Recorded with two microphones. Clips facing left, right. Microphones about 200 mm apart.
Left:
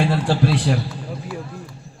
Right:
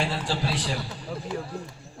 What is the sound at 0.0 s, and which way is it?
Speech, 60° left (ahead or behind).